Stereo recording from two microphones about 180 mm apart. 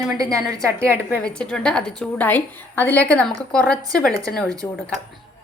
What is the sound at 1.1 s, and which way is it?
A woman's voice, 5° left (ahead or behind).